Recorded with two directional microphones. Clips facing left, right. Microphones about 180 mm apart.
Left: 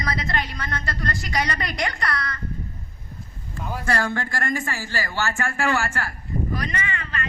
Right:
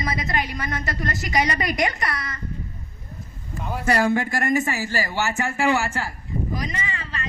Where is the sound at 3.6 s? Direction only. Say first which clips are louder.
Right 3 dB; 5° right (ahead or behind).